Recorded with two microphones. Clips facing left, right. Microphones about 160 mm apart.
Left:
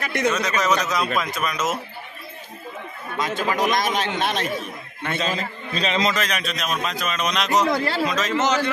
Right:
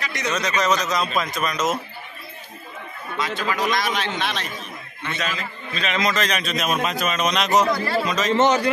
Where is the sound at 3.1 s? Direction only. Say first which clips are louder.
Left 2 dB; 45° left (ahead or behind).